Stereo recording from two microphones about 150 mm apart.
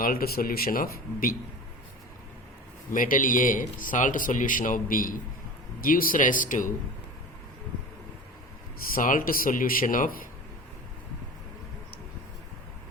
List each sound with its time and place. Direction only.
0.0 s speech: 80° left
2.9 s speech: 60° left (ahead or behind)
8.8 s speech: 70° left (ahead or behind)